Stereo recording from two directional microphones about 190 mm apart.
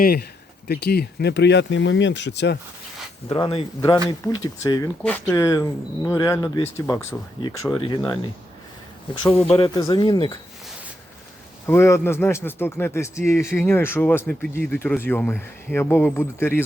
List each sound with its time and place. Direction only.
0.0 s speech: 50° left (ahead or behind)
3.2 s speech: 30° left (ahead or behind)
3.8 s a man's voice: 15° left (ahead or behind)
7.4 s speech: 25° left (ahead or behind)
9.2 s speech: 30° left (ahead or behind)
9.6 s speech: 20° left (ahead or behind)
11.6 s a man's voice: 15° left (ahead or behind)